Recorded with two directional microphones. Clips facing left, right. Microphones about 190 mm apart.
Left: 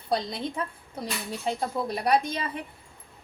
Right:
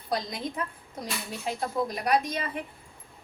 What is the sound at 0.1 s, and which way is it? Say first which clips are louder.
Speech: left 3 dB; 30° left (ahead or behind).